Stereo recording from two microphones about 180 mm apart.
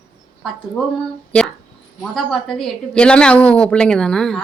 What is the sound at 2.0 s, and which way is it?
A woman's voice, centre (ahead or behind).